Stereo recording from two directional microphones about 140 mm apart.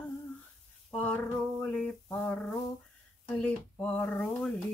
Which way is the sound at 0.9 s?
10° left (ahead or behind).